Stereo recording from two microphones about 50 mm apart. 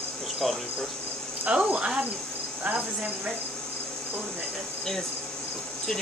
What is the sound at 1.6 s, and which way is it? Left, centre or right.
Speech, right.